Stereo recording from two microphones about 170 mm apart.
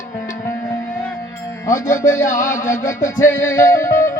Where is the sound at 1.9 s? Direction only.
50° left (ahead or behind).